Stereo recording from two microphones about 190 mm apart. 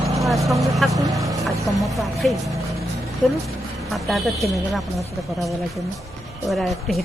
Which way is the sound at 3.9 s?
Centre (ahead or behind).